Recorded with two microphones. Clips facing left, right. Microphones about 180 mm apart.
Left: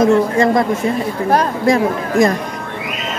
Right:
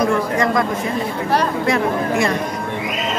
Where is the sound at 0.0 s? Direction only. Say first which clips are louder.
Left 5 dB; 25° left (ahead or behind).